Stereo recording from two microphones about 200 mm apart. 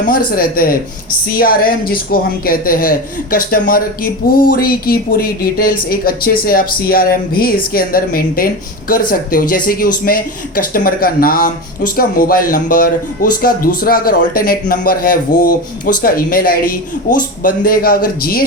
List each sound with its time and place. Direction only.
0.0 s speech: 45° left (ahead or behind)